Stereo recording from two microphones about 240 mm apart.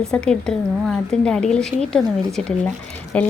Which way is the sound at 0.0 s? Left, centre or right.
Centre.